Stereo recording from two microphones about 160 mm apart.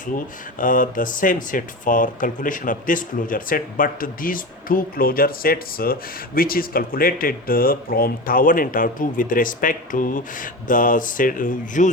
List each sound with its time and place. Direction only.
0.6 s speech: 60° left (ahead or behind)